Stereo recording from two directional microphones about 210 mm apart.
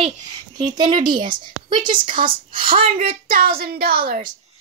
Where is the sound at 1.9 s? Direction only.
40° right (ahead or behind).